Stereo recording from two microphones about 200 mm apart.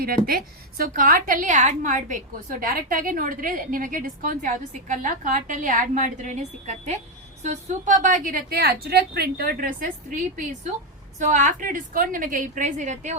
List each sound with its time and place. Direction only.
0.3 s a woman's voice: 45° right (ahead or behind)